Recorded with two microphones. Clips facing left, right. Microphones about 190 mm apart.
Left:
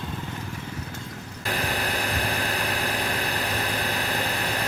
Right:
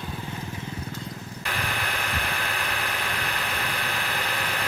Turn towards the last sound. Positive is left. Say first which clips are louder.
# left 3 dB
turn(degrees=40)  # may be behind; listen again after turning